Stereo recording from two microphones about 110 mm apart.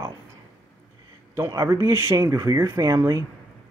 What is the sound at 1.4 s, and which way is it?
Speech, 30° right (ahead or behind).